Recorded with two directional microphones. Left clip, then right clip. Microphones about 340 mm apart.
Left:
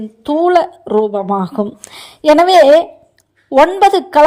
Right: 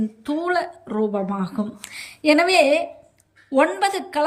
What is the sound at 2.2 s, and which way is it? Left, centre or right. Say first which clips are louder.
Speech: left 8 dB; left.